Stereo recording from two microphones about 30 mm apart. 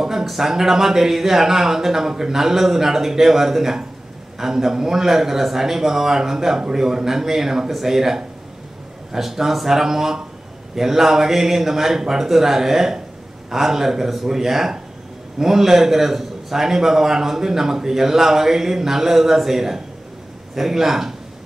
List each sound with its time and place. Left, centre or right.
0.2 s a man's voice: centre